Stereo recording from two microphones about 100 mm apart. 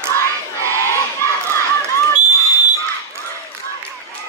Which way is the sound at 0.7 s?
25° left (ahead or behind).